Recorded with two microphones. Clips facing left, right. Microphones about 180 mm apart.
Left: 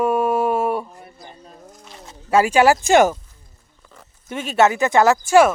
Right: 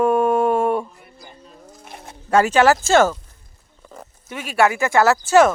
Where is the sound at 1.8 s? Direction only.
55° right (ahead or behind).